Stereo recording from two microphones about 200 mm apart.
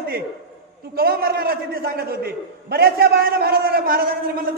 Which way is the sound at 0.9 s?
50° right (ahead or behind).